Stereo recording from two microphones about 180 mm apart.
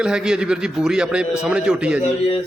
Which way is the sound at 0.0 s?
5° right (ahead or behind).